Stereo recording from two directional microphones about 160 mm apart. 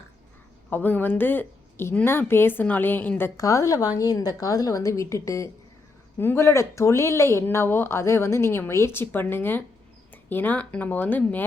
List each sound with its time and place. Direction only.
0.7 s a woman's voice: 10° left (ahead or behind)